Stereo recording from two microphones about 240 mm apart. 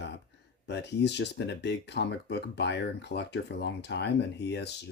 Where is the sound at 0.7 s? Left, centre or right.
Left.